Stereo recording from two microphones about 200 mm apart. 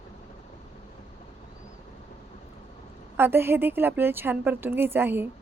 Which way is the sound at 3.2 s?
10° right (ahead or behind).